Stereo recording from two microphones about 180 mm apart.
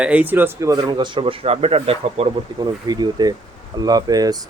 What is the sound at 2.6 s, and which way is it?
Speech, 20° right (ahead or behind).